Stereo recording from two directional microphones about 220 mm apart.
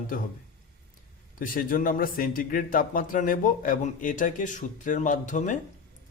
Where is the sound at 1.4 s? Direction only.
40° left (ahead or behind).